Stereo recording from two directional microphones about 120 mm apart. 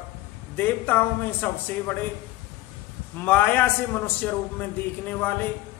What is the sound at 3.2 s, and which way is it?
A man's voice, 15° left (ahead or behind).